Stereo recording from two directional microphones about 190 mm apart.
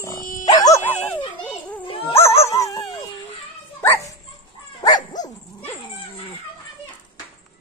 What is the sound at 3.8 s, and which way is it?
Speech, 10° left (ahead or behind).